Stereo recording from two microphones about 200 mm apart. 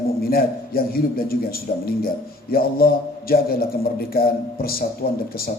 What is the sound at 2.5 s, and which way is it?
A man's voice, 50° left (ahead or behind).